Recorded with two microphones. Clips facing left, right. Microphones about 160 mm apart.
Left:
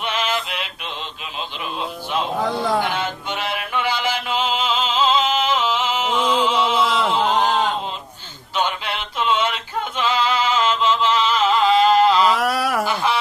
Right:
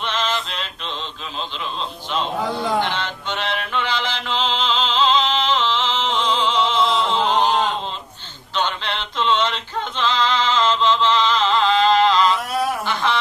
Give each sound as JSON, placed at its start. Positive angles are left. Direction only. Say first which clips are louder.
{"t": 0.0, "sound": "male singing", "louder": "even", "side_deg": 10}
{"t": 2.8, "sound": "mantra", "louder": "left 1 dB", "side_deg": 10}
{"t": 6.3, "sound": "opera", "louder": "left 1 dB", "side_deg": 10}
{"t": 8.5, "sound": "male singing", "louder": "left 1 dB", "side_deg": 10}
{"t": 12.4, "sound": "a sound", "louder": "left 2 dB", "side_deg": 90}
{"t": 12.8, "sound": "a sound", "louder": "left 1 dB", "side_deg": 10}